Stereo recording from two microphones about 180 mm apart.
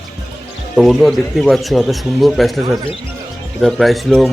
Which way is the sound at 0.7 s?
Centre (ahead or behind).